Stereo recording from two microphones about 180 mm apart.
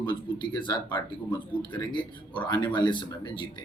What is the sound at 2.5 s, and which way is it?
Speech, 25° left (ahead or behind).